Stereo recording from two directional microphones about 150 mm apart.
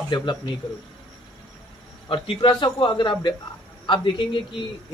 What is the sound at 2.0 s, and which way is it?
A man's voice, 35° left (ahead or behind).